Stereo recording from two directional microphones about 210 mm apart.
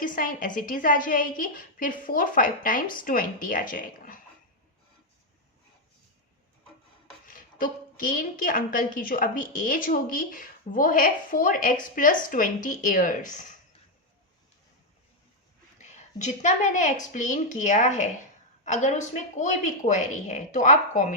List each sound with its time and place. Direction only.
0.0 s a woman's voice: 40° left (ahead or behind)
7.3 s a woman's voice: 40° left (ahead or behind)
15.8 s a woman's voice: 35° left (ahead or behind)